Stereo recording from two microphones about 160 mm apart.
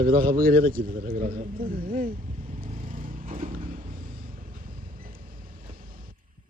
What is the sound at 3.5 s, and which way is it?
Mechanisms, 60° right (ahead or behind).